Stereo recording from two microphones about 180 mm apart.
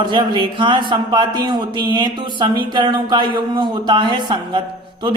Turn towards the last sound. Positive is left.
turn(degrees=-25)  # may be behind; listen again after turning